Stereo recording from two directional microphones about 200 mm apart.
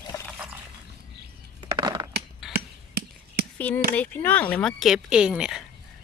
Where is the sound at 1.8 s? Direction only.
20° right (ahead or behind).